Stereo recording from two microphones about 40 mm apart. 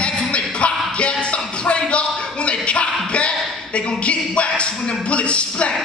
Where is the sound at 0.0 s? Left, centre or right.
Centre.